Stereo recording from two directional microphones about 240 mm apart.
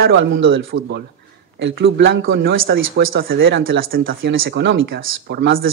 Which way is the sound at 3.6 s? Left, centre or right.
Right.